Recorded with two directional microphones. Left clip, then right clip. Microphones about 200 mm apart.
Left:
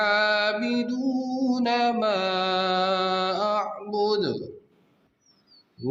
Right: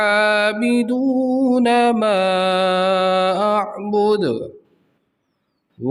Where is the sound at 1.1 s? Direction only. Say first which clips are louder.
Right 10 dB; 90° right.